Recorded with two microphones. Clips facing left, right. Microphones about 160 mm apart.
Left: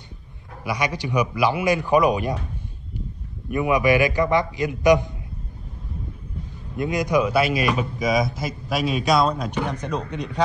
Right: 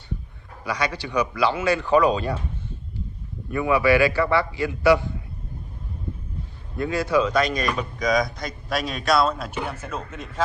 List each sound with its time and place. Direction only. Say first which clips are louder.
0.7 s speech: left 2 dB; 15° left (ahead or behind)
3.4 s speech: even; 20° left (ahead or behind)
6.8 s speech: left 1 dB; 15° left (ahead or behind); by 10.4 s centre (ahead or behind)